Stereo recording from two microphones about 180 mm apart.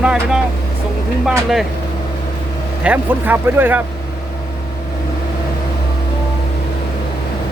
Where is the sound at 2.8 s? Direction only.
10° right (ahead or behind).